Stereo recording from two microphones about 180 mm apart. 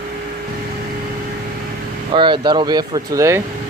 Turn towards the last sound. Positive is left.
turn(degrees=-15)  # may be behind; listen again after turning